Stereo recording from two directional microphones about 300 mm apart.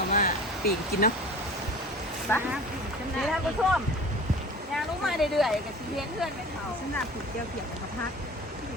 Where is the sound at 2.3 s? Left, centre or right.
Centre.